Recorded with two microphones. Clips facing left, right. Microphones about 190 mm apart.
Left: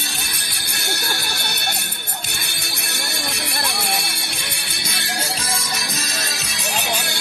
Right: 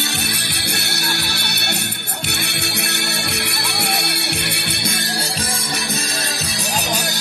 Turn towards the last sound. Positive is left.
turn(degrees=-40)  # may be behind; listen again after turning